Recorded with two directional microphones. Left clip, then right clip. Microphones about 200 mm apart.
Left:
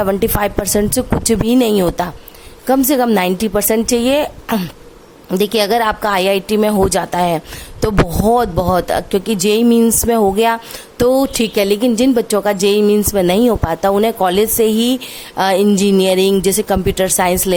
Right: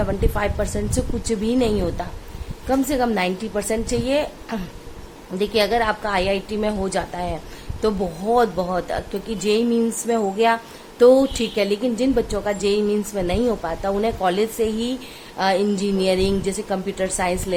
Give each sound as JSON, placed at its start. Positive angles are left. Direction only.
{"t": 0.0, "sound": "a woman's voice", "side_deg": 55}